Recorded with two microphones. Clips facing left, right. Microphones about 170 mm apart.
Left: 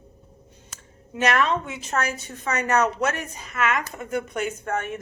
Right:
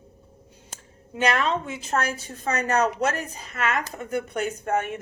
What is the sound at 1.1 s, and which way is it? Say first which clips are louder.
A woman's voice: left 1 dB; 30° right (ahead or behind).